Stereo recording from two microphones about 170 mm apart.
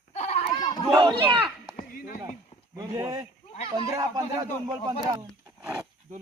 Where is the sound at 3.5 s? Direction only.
35° left (ahead or behind).